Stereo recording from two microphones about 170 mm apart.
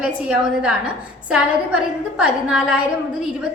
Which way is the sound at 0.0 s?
5° right (ahead or behind).